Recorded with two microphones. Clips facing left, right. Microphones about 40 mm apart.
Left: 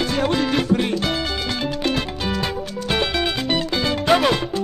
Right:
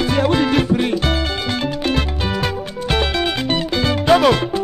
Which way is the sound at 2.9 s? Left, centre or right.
Centre.